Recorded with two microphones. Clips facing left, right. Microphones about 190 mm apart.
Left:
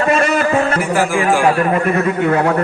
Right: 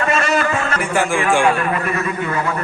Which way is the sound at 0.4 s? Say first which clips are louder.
Left 5 dB; 30° left (ahead or behind).